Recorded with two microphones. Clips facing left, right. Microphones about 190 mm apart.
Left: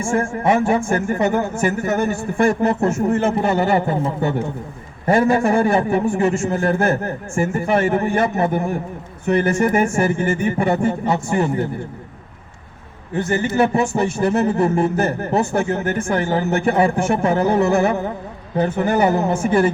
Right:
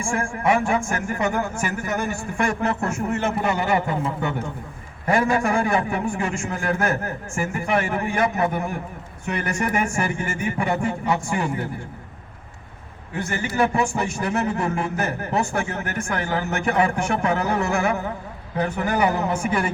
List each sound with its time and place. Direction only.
0.0 s a man's voice: 25° left (ahead or behind)
13.9 s a man's voice: 35° left (ahead or behind)